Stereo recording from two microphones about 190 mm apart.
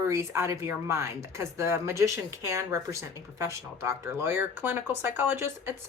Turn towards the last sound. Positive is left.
turn(degrees=-10)  # may be behind; listen again after turning